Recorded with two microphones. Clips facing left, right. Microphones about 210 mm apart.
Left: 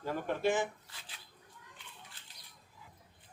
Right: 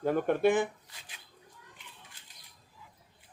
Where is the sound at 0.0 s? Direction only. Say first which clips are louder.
Right 7 dB; 60° right (ahead or behind).